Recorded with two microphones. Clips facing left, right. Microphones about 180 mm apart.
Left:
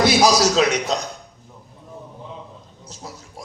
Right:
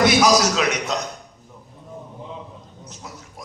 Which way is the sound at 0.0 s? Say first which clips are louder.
Even; 30° left (ahead or behind).